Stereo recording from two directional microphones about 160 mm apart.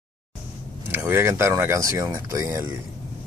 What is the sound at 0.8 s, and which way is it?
Speech, 15° right (ahead or behind).